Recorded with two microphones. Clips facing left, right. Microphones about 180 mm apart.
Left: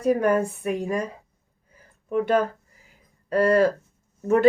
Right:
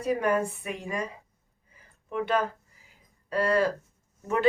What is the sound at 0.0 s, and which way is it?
Speech, 45° left (ahead or behind).